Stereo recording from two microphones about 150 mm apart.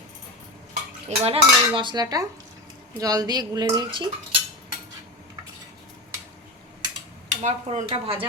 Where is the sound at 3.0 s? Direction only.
25° right (ahead or behind).